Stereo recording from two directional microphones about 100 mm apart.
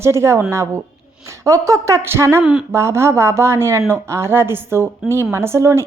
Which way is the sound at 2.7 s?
25° right (ahead or behind).